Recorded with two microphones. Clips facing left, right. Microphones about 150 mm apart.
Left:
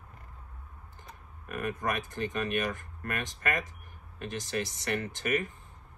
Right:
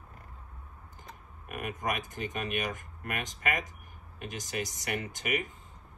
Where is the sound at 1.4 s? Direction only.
20° right (ahead or behind).